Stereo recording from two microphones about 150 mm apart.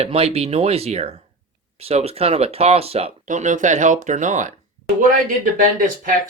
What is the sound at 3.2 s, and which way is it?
Speech, 55° right (ahead or behind).